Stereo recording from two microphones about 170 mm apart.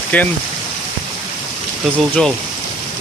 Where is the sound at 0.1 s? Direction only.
10° left (ahead or behind).